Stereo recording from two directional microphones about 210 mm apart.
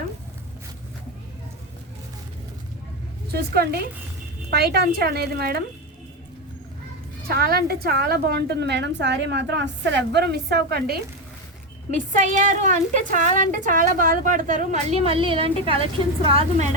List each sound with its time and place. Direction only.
3.5 s a woman's voice: 50° right (ahead or behind)
7.3 s a woman's voice: 45° right (ahead or behind)
12.1 s a woman's voice: 35° right (ahead or behind)